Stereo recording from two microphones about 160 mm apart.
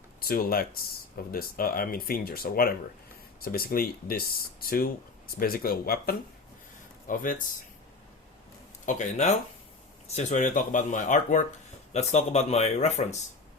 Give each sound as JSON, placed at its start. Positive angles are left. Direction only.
{"t": 0.2, "sound": "speech", "side_deg": 65}
{"t": 7.1, "sound": "speech", "side_deg": 55}
{"t": 8.9, "sound": "speech", "side_deg": 45}